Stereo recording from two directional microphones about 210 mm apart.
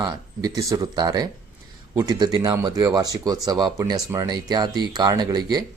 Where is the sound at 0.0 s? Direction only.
15° right (ahead or behind).